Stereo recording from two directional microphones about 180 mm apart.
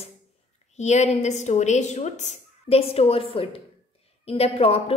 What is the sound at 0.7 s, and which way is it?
A woman's voice, 40° left (ahead or behind).